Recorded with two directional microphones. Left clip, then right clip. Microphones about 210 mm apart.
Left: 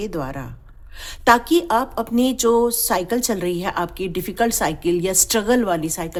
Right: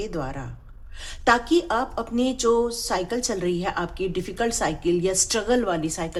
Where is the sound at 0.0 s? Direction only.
40° left (ahead or behind).